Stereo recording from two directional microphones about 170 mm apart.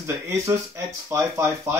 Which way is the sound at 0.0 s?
15° right (ahead or behind).